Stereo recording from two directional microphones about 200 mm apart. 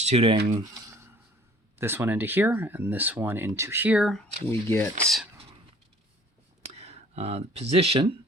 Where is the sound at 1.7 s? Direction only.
10° right (ahead or behind).